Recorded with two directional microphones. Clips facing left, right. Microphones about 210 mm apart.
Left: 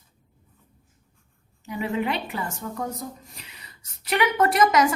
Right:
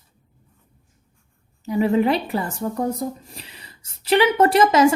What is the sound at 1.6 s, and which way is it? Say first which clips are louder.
A woman's voice: right 8 dB; 35° right (ahead or behind).